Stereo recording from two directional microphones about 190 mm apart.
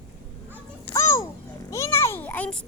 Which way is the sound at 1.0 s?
15° left (ahead or behind).